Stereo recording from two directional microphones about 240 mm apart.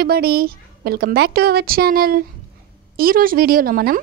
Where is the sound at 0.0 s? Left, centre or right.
Right.